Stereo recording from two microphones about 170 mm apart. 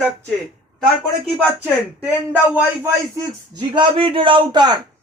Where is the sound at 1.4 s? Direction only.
10° right (ahead or behind); by 4.8 s 25° right (ahead or behind).